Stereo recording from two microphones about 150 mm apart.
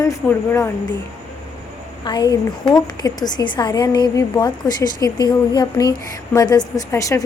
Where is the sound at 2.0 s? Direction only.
25° left (ahead or behind).